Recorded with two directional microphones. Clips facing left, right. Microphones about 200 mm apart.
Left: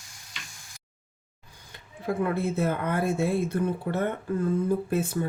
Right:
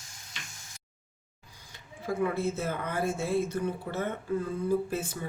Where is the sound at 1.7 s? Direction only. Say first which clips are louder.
Left 3 dB; 60° left (ahead or behind).